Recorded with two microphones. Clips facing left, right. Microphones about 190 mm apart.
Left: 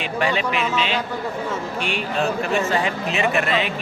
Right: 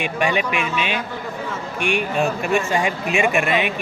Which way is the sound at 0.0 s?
15° right (ahead or behind).